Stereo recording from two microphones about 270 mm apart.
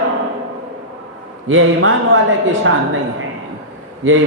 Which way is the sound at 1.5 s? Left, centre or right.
Right.